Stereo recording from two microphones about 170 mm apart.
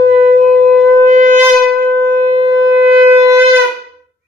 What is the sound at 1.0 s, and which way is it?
Shofar, 50° right (ahead or behind).